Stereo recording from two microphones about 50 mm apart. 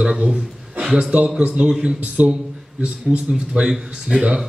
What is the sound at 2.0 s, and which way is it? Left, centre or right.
A man's voice, right.